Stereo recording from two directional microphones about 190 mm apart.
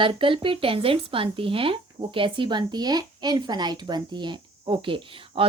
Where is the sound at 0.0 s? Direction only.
25° right (ahead or behind).